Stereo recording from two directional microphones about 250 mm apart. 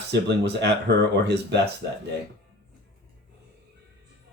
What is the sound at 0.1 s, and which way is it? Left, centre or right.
Speech, right.